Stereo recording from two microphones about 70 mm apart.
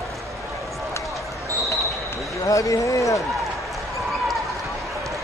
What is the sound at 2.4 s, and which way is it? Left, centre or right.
Speech, left.